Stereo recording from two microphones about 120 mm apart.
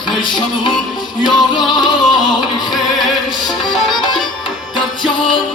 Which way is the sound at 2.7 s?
Centre (ahead or behind).